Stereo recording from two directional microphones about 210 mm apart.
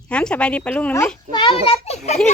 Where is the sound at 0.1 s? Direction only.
5° left (ahead or behind).